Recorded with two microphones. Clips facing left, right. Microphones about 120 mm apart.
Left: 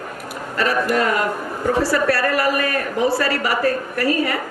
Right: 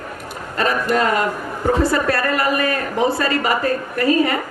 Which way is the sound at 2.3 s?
25° right (ahead or behind).